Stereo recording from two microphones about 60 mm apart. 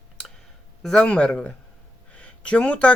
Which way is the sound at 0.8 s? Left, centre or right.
Centre.